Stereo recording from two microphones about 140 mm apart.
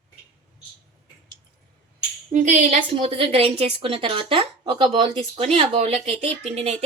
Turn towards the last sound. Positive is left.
turn(degrees=-50)  # may be behind; listen again after turning